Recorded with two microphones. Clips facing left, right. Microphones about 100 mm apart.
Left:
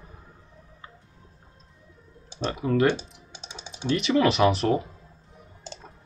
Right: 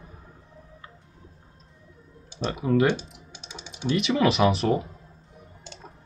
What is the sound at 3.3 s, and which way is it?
Typing, 30° left (ahead or behind).